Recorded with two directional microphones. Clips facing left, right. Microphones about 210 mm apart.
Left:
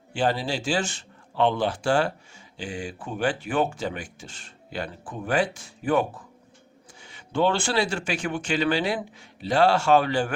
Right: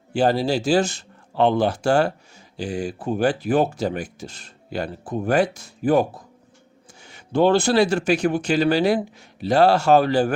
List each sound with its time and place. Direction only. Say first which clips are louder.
0.1 s speech: right 6 dB; 40° right (ahead or behind)